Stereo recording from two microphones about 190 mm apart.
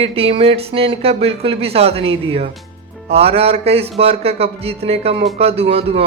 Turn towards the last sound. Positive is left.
turn(degrees=-30)  # may be behind; listen again after turning